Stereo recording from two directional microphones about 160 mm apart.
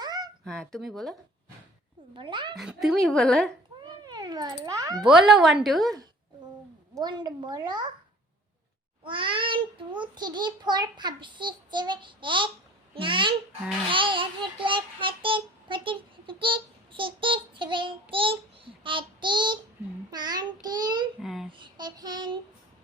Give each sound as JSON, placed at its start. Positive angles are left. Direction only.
{"t": 0.0, "sound": "a sound", "side_deg": -25}
{"t": 0.4, "sound": "speech", "side_deg": 5}
{"t": 2.1, "sound": "child singing", "side_deg": -30}
{"t": 2.6, "sound": "speech", "side_deg": 0}
{"t": 4.0, "sound": "speech", "side_deg": -25}
{"t": 5.0, "sound": "speech", "side_deg": -5}
{"t": 7.0, "sound": "a child's voice", "side_deg": -25}
{"t": 9.0, "sound": "a child's voice", "side_deg": -30}
{"t": 13.9, "sound": "child singing", "side_deg": -30}
{"t": 20.1, "sound": "a child's voice", "side_deg": -25}
{"t": 21.2, "sound": "speech", "side_deg": 0}
{"t": 21.6, "sound": "a child's voice", "side_deg": -25}